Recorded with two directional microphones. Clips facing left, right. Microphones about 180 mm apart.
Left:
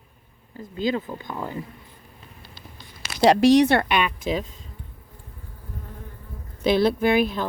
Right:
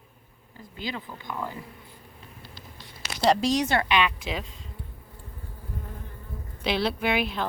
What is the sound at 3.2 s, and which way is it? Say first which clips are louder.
Speech: left 8 dB; 70° left (ahead or behind).